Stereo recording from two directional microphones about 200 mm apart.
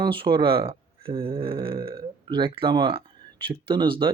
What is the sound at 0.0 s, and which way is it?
Speech, 25° right (ahead or behind).